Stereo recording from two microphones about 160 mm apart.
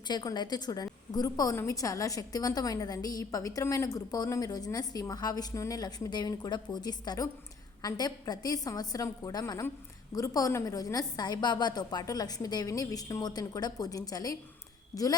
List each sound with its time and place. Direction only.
0.1 s a woman's voice: 25° left (ahead or behind)